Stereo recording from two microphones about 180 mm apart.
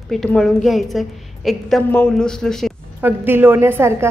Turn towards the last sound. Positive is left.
turn(degrees=-15)  # may be behind; listen again after turning